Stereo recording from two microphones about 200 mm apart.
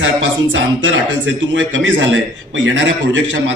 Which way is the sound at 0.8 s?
65° right (ahead or behind).